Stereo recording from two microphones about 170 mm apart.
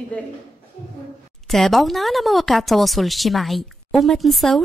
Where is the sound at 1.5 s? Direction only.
Centre (ahead or behind).